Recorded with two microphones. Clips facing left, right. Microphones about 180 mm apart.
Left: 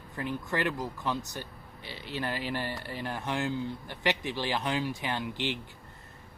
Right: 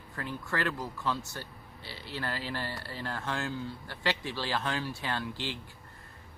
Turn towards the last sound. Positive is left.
turn(degrees=20)  # may be behind; listen again after turning